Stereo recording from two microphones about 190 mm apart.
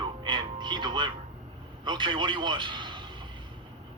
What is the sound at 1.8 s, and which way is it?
A man's voice, 25° right (ahead or behind).